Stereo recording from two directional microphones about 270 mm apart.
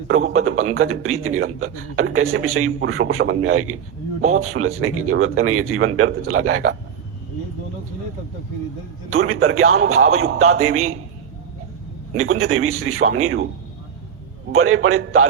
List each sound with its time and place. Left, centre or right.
0.1 s a man's voice: right
9.0 s a man's voice: right
12.1 s a man's voice: right
14.5 s a man's voice: right